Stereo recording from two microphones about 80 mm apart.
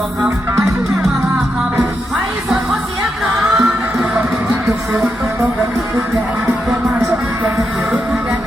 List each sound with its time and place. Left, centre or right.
3.4 s music: centre